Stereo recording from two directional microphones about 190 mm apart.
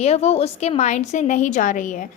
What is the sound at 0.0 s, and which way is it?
A woman's voice, 35° left (ahead or behind).